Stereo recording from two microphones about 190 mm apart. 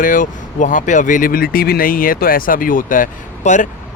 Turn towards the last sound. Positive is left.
turn(degrees=45)  # may be behind; listen again after turning